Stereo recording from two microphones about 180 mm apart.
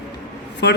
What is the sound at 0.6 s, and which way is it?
Speech, 70° left (ahead or behind).